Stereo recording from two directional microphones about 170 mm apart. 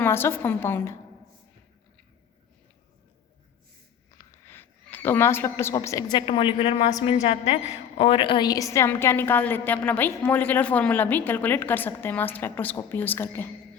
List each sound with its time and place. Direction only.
0.0 s a woman's voice: 15° left (ahead or behind)
4.4 s a woman's voice: 15° left (ahead or behind)